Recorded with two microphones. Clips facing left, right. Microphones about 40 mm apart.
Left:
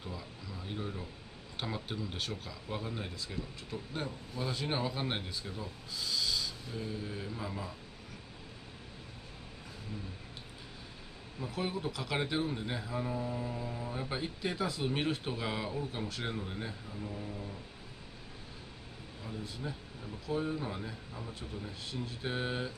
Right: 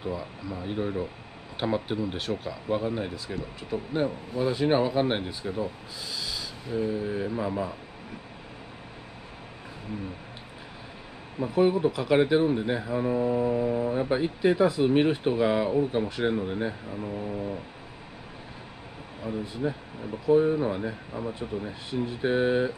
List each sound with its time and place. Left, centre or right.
0.0 s speech: right
7.2 s mantra: right
11.5 s speech: right
13.1 s mantra: right
13.9 s speech: right
16.9 s speech: right
17.3 s a sound: right
19.4 s speech: centre